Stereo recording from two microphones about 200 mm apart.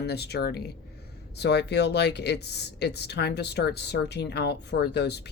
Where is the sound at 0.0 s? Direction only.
55° left (ahead or behind).